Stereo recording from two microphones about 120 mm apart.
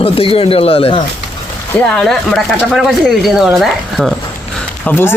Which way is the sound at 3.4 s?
Centre (ahead or behind).